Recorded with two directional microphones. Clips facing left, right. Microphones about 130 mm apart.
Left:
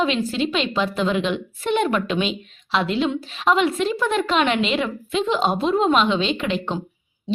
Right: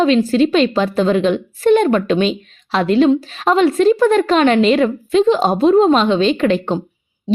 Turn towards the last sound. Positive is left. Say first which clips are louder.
# right 8 dB
turn(degrees=-40)  # may be behind; listen again after turning